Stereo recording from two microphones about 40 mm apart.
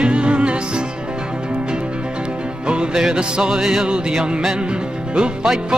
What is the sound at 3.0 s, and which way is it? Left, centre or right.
Music, centre.